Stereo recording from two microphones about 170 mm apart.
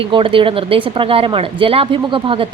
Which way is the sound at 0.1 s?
30° right (ahead or behind).